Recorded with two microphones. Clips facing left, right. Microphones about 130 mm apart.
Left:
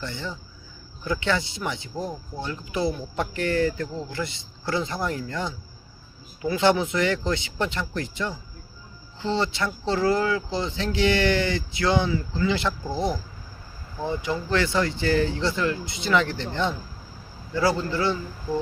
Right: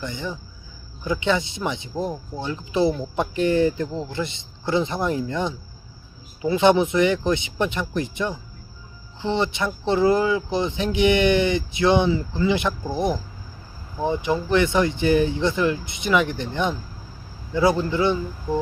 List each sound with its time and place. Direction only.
0.0 s speech: 15° right (ahead or behind)